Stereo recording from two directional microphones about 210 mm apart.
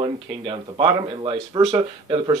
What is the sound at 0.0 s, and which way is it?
Speech, 25° right (ahead or behind).